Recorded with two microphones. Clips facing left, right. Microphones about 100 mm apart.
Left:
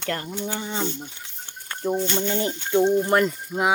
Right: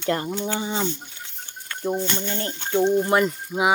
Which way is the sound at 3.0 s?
5° right (ahead or behind).